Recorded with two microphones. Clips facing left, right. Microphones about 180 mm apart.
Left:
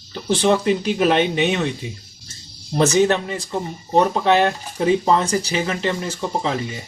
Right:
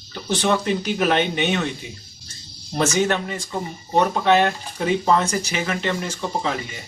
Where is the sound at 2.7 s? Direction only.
30° left (ahead or behind).